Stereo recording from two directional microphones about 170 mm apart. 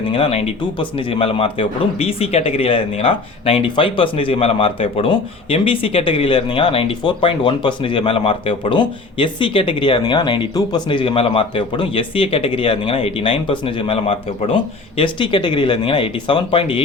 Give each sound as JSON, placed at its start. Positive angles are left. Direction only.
{"t": 0.1, "sound": "a man's voice", "side_deg": 35}